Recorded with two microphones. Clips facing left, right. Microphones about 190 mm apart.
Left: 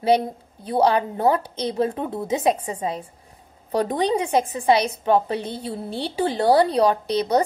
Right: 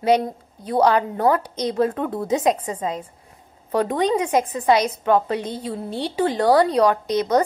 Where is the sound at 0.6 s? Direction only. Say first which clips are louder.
Right 1 dB; 30° left (ahead or behind).